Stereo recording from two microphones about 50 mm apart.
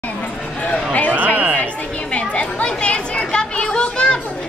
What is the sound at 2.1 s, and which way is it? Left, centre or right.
Chatter, left.